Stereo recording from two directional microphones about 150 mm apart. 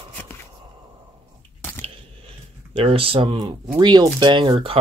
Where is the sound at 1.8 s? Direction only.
35° right (ahead or behind).